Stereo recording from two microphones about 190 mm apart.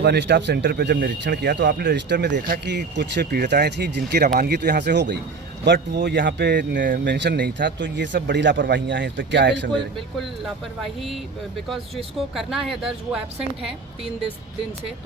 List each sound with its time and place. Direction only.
0.0 s speech: 65° right (ahead or behind)
7.0 s speech: 65° right (ahead or behind)
12.1 s speech: centre (ahead or behind)